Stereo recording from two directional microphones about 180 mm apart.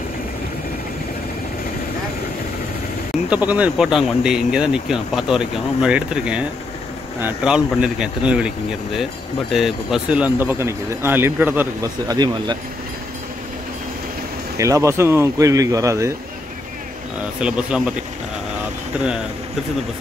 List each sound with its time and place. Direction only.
3.3 s speech: 10° right (ahead or behind)
14.6 s speech: 15° right (ahead or behind)
17.4 s speech: 5° right (ahead or behind)